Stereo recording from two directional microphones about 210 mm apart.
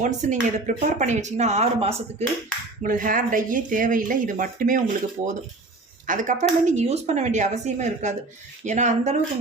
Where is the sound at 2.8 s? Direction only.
40° right (ahead or behind).